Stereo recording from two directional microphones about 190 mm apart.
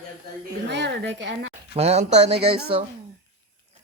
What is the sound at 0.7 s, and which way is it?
Speech, 65° right (ahead or behind).